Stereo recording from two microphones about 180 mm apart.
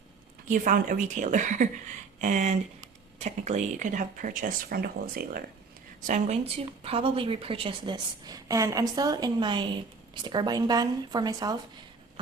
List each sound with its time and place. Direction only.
0.4 s speech: 45° right (ahead or behind)
6.1 s a woman's voice: 40° right (ahead or behind); by 11.5 s 20° right (ahead or behind)